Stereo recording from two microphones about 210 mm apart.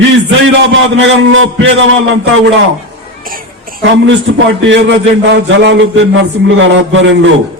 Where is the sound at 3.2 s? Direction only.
40° right (ahead or behind).